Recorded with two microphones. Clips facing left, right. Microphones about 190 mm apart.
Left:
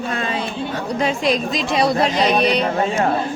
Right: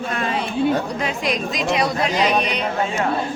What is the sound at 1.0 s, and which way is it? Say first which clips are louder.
Speech: left 4 dB; 30° left (ahead or behind).